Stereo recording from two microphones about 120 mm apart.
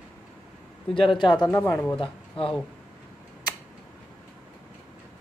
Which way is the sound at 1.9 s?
45° left (ahead or behind).